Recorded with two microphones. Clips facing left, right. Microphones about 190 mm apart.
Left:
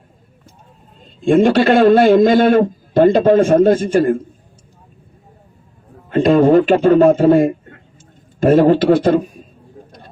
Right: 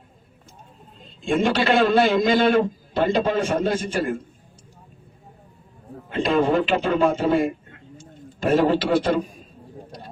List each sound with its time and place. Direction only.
1.2 s a man's voice: 50° left (ahead or behind)
6.1 s a man's voice: 50° left (ahead or behind)